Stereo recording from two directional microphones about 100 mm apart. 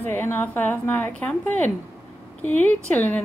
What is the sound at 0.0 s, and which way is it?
A woman's voice, 20° left (ahead or behind).